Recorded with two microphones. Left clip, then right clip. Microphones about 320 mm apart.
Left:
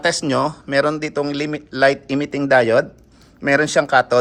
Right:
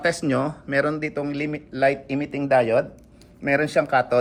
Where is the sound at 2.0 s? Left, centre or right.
Left.